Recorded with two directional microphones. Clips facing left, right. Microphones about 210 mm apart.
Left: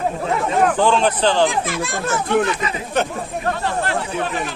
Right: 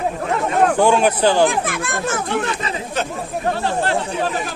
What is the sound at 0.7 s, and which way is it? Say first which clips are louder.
Speech: right 2 dB; 10° right (ahead or behind).